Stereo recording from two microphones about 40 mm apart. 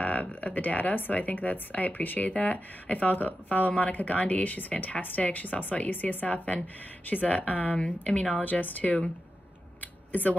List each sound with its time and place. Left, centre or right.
0.0 s a woman's voice: left
8.5 s a woman's voice: left
9.8 s a sound: left